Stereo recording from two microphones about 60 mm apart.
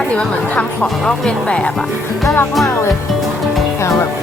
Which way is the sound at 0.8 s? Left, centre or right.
Centre.